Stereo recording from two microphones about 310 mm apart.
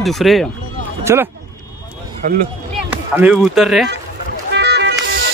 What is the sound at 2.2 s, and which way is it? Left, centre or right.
Speech, right.